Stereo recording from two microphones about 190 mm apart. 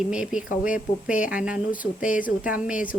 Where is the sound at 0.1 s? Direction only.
5° right (ahead or behind).